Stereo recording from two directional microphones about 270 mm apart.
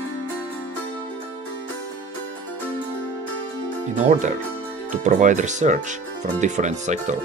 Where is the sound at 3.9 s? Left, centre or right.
Right.